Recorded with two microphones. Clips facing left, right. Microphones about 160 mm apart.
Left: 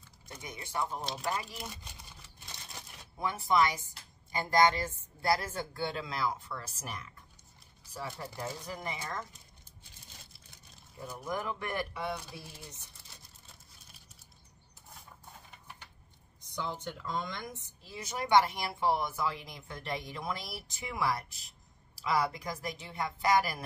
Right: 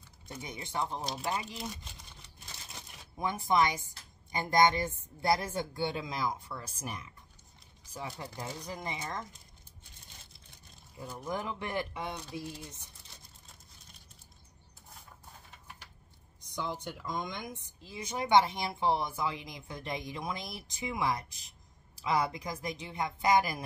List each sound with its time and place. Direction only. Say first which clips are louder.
0.4 s a woman's voice: even; 20° right (ahead or behind)
2.2 s a sound: even; centre (ahead or behind)
3.2 s a woman's voice: even; 20° right (ahead or behind)
11.0 s a woman's voice: even; 15° right (ahead or behind)
16.4 s a woman's voice: right 1 dB; 15° right (ahead or behind)